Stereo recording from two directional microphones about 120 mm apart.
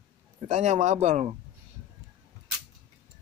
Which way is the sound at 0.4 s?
85° right.